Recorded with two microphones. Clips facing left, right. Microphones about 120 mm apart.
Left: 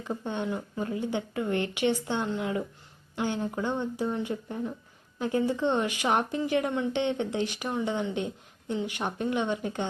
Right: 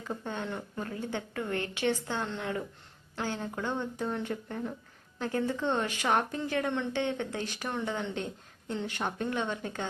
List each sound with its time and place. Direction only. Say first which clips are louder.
0.1 s speech: left 4 dB; 20° left (ahead or behind)
0.4 s speech: left 5 dB; 5° left (ahead or behind)
6.9 s speech: left 4 dB; 20° left (ahead or behind)